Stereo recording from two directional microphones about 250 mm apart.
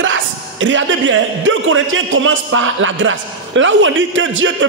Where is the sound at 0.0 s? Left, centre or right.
Right.